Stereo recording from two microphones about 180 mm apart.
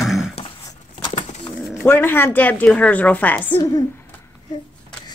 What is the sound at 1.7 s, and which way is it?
Speech, 5° left (ahead or behind).